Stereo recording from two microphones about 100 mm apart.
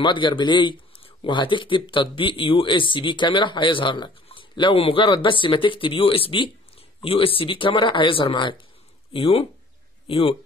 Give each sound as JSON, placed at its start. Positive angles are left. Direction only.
{"t": 0.0, "sound": "speech", "side_deg": 50}
{"t": 9.1, "sound": "speech", "side_deg": 70}